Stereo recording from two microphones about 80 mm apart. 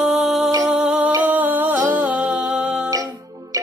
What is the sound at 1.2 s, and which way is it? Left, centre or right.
Music, right.